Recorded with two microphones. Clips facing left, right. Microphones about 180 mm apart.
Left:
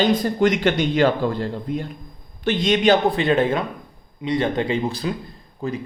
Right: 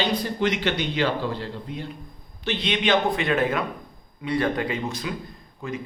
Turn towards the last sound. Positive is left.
turn(degrees=35)  # may be behind; listen again after turning